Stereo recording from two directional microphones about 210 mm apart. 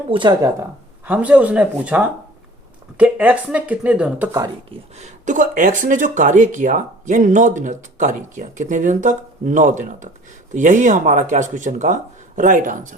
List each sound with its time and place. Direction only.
0.1 s speech: 20° right (ahead or behind)
1.0 s speech: 5° right (ahead or behind)
4.9 s speech: 35° right (ahead or behind)